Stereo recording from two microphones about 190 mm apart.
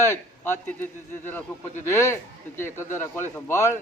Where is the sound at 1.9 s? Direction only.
15° left (ahead or behind).